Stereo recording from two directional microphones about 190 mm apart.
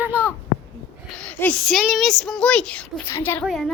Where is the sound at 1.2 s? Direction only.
5° left (ahead or behind).